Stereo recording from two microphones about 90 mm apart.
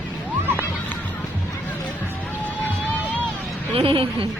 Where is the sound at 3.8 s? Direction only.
85° right.